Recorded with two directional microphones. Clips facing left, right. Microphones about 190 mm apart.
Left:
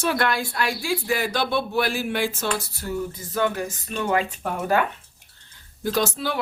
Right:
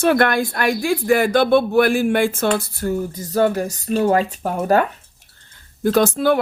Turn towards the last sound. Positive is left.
turn(degrees=-50)  # may be behind; listen again after turning